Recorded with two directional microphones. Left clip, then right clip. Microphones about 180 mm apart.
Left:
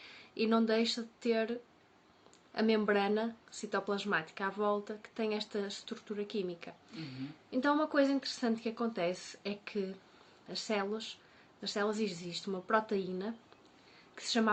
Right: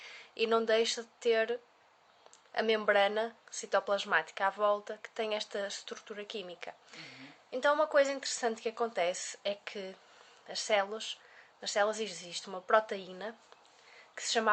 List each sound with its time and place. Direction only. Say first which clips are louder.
0.0 s speech: right 2 dB; 35° right (ahead or behind)
2.6 s speech: right 3 dB; 30° right (ahead or behind)